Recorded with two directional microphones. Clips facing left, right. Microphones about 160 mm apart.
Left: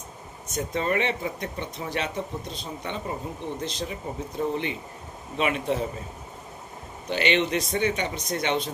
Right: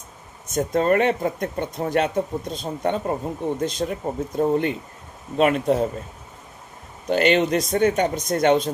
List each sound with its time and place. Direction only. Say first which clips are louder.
0.4 s speech: right 7 dB; 50° right (ahead or behind)
7.1 s speech: right 6 dB; 45° right (ahead or behind)